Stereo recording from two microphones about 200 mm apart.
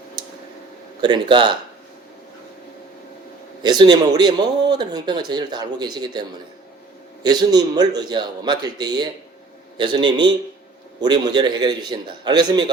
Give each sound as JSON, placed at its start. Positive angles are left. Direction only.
{"t": 0.2, "sound": "a sound", "side_deg": -20}
{"t": 1.0, "sound": "speech", "side_deg": -20}
{"t": 3.6, "sound": "speech", "side_deg": -20}